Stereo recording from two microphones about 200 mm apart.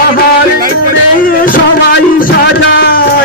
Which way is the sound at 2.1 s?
55° left (ahead or behind).